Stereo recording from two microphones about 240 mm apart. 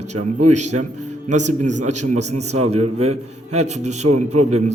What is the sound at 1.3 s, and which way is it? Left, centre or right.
A man's voice, right.